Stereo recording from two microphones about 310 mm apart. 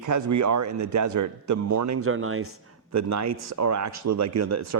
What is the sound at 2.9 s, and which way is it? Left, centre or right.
A man's voice, right.